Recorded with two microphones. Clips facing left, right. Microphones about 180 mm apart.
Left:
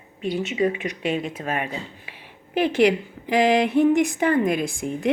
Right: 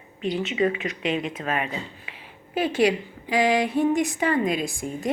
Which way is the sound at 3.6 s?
70° left (ahead or behind).